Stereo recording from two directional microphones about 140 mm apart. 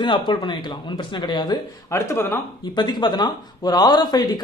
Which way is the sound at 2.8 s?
30° left (ahead or behind).